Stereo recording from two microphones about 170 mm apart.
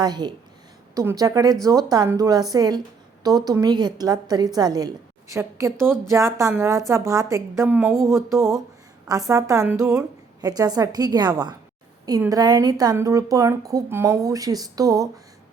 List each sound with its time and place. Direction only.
0.0 s a woman's voice: 25° right (ahead or behind)
7.9 s a sound: 15° right (ahead or behind)
9.0 s a woman's voice: 20° right (ahead or behind)